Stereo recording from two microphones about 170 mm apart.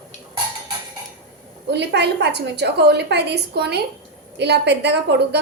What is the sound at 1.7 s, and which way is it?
A woman's voice, 80° right.